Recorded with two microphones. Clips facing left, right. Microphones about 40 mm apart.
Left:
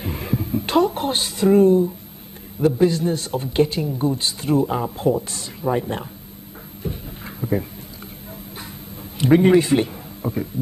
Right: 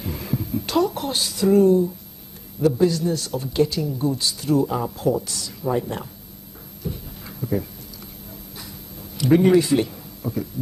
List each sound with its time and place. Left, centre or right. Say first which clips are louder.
0.0 s a man's voice: left 2 dB; left
6.8 s a sound: left 2 dB; left
9.2 s a man's voice: left 1 dB; left